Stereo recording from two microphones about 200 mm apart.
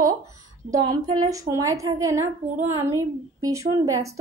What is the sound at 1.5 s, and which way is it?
A woman's voice, 15° right (ahead or behind).